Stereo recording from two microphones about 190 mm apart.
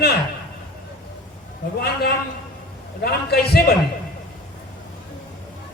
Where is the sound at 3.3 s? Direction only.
55° left (ahead or behind).